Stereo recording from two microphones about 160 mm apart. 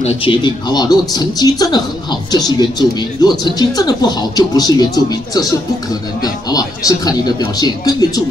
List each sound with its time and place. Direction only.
0.0 s speech: 35° left (ahead or behind)